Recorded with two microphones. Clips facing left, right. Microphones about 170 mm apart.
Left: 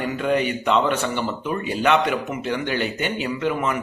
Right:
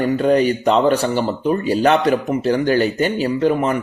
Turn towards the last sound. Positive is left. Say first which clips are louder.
# right 6 dB
turn(degrees=-35)  # may be behind; listen again after turning